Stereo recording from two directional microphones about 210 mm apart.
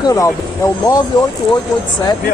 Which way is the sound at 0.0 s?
15° left (ahead or behind).